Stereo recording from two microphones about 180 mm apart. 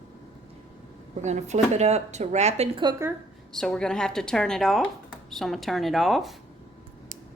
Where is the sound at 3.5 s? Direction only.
5° left (ahead or behind).